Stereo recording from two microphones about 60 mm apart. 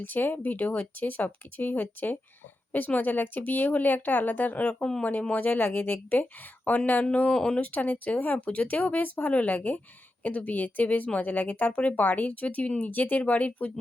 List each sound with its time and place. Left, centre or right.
0.0 s speech: left
4.7 s speech: centre
5.0 s speech: left
7.6 s speech: left